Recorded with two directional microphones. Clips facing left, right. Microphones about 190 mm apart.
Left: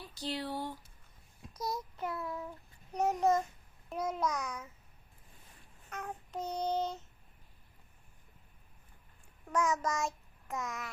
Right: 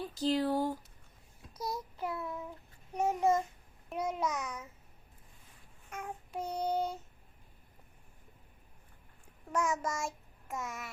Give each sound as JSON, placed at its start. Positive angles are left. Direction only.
{"t": 0.0, "sound": "speech", "side_deg": -45}
{"t": 1.7, "sound": "child singing", "side_deg": -5}
{"t": 2.2, "sound": "a child's voice", "side_deg": 0}
{"t": 3.8, "sound": "child singing", "side_deg": -10}
{"t": 5.9, "sound": "child singing", "side_deg": -10}
{"t": 9.6, "sound": "child singing", "side_deg": -25}
{"t": 10.5, "sound": "a child's voice", "side_deg": -5}